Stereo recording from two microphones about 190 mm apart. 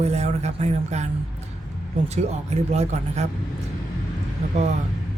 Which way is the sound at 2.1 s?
35° right (ahead or behind).